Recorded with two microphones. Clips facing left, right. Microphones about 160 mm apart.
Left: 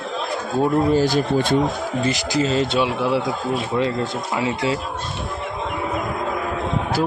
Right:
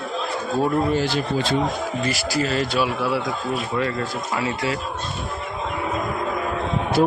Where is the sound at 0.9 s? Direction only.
40° left (ahead or behind).